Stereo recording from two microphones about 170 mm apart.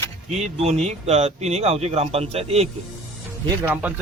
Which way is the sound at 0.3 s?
40° right (ahead or behind).